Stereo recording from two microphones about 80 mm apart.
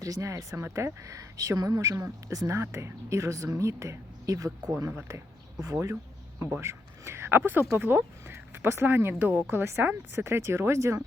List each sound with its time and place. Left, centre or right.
0.0 s a woman's voice: right
5.0 s a sound: right
6.6 s a woman's voice: right